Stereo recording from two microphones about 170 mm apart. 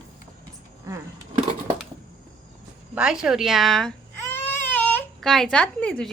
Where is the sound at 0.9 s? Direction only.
20° right (ahead or behind).